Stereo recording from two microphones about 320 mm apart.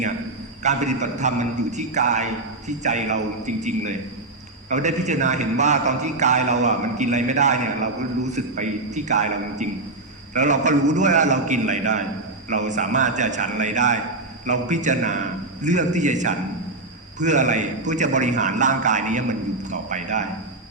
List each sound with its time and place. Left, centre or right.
0.6 s a man's voice: right